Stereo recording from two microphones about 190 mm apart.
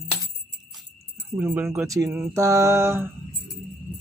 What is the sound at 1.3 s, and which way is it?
Speech, 10° right (ahead or behind).